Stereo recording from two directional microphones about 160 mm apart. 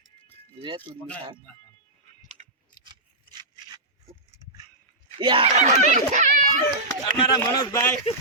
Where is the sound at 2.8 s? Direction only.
30° right (ahead or behind).